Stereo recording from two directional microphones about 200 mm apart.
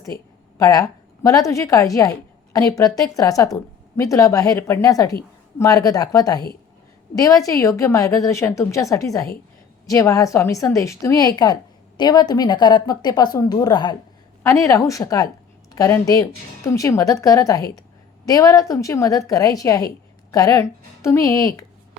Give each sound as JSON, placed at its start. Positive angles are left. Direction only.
{"t": 0.6, "sound": "a woman's voice", "side_deg": 15}